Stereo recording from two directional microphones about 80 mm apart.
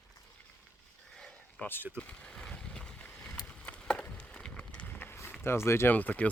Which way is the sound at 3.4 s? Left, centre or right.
Centre.